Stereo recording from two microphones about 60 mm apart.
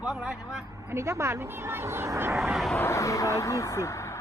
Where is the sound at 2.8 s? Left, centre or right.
Left.